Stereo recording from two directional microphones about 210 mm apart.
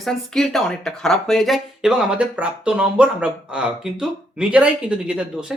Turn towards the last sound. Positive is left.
turn(degrees=-5)  # may be behind; listen again after turning